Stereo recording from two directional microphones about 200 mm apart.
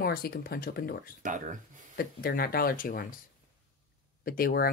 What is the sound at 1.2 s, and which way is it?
Speech, 40° right (ahead or behind).